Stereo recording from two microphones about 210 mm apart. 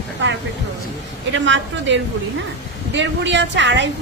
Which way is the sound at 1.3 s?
60° right (ahead or behind).